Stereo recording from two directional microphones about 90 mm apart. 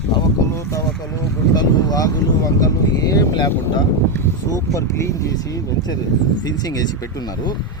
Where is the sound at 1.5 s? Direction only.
45° left (ahead or behind).